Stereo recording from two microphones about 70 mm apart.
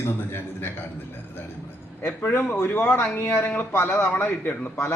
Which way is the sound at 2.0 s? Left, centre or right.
Left.